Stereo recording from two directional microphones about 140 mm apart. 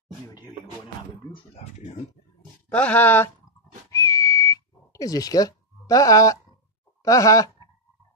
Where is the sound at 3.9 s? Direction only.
25° left (ahead or behind).